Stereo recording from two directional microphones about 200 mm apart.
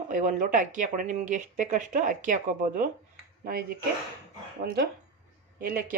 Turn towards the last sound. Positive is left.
turn(degrees=-45)  # may be behind; listen again after turning